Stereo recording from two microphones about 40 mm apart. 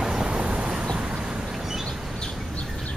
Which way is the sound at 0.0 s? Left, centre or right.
Centre.